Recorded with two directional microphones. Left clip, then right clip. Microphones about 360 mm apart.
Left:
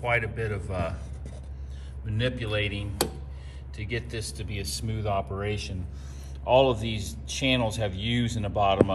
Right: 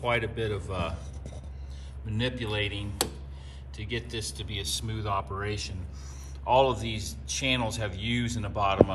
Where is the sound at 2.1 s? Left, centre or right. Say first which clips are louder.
Left 2 dB; centre.